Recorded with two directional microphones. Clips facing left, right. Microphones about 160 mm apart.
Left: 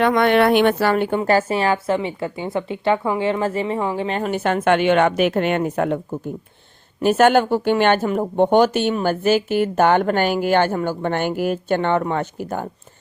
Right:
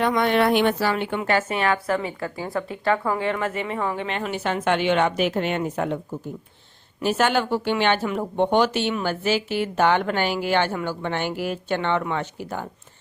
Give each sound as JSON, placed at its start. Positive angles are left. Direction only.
{"t": 0.0, "sound": "a woman's voice", "side_deg": 65}
{"t": 7.0, "sound": "speech", "side_deg": 50}